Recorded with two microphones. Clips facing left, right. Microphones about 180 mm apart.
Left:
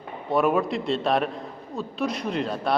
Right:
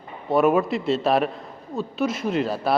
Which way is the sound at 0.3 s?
Centre (ahead or behind).